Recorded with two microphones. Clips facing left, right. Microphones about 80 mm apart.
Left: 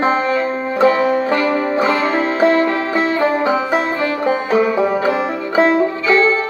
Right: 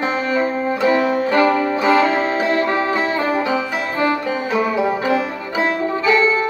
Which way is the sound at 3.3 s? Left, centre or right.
Left.